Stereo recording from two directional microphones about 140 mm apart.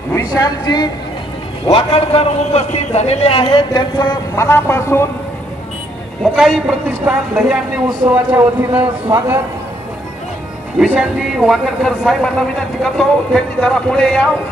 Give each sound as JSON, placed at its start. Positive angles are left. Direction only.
{"t": 0.1, "sound": "a woman's voice", "side_deg": 25}
{"t": 1.7, "sound": "a man's voice", "side_deg": 40}
{"t": 4.5, "sound": "a man's voice", "side_deg": 20}
{"t": 6.3, "sound": "speech", "side_deg": 0}
{"t": 10.8, "sound": "speech", "side_deg": -5}